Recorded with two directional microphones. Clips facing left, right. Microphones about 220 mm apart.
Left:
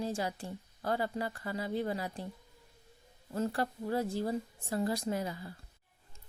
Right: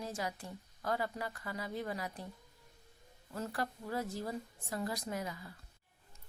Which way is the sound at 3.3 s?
30° left (ahead or behind).